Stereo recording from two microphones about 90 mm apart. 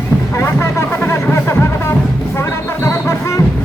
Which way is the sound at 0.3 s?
30° left (ahead or behind).